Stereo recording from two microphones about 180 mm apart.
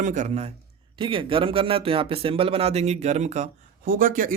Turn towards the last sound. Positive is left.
turn(degrees=-50)  # may be behind; listen again after turning